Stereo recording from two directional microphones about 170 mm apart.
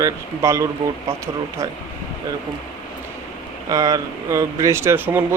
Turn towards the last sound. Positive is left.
turn(degrees=-10)  # may be behind; listen again after turning